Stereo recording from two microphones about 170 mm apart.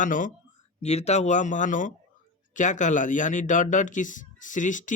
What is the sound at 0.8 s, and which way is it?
Speech, 40° left (ahead or behind).